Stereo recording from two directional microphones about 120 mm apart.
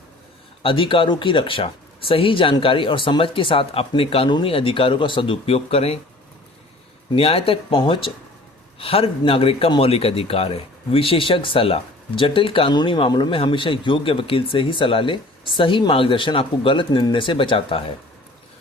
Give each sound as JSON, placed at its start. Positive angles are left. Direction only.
{"t": 0.6, "sound": "a man's voice", "side_deg": 45}
{"t": 7.2, "sound": "a man's voice", "side_deg": 55}